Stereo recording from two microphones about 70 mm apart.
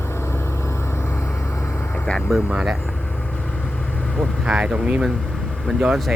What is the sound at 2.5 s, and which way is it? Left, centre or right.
Speech, centre.